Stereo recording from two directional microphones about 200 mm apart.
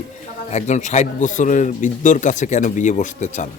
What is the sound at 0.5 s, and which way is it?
Speech, 35° left (ahead or behind).